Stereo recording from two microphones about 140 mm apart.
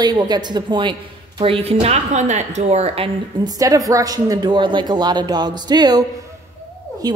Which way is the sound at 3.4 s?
25° right (ahead or behind).